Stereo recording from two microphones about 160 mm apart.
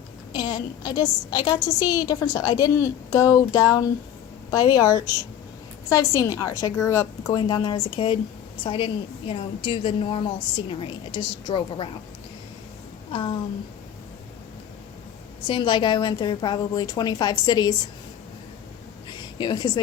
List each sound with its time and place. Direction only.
0.3 s a woman's voice: 25° left (ahead or behind)
13.1 s a woman's voice: 35° left (ahead or behind)
15.4 s a woman's voice: 30° left (ahead or behind)
19.1 s a sound: 30° left (ahead or behind)